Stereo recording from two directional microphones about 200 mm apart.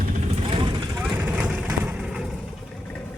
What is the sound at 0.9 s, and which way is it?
Vehicle, 5° right (ahead or behind).